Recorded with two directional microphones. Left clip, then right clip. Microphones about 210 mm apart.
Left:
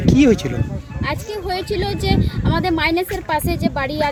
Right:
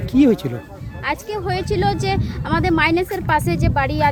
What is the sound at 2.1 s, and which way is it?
Speech, 5° right (ahead or behind).